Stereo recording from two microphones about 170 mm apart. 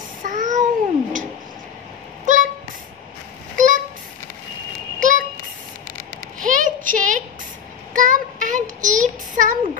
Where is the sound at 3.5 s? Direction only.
50° right (ahead or behind).